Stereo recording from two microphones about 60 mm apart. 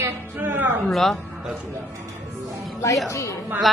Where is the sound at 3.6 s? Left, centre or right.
Centre.